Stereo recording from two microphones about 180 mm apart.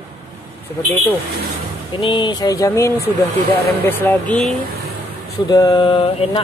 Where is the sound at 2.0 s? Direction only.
25° left (ahead or behind).